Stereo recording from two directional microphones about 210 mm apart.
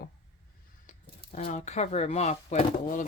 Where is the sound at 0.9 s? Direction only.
35° left (ahead or behind).